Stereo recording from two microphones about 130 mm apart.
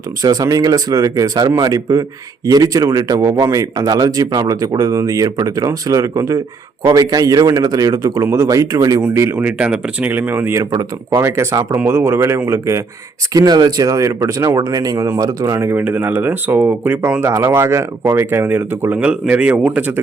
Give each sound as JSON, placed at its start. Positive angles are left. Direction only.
{"t": 0.2, "sound": "speech", "side_deg": -25}